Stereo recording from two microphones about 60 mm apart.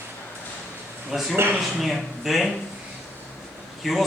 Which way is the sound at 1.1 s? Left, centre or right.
Centre.